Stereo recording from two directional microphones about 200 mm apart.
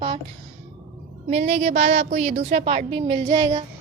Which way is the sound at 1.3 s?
30° right (ahead or behind).